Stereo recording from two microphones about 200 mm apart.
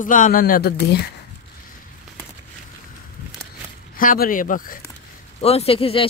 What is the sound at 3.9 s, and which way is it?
Speech, 45° left (ahead or behind).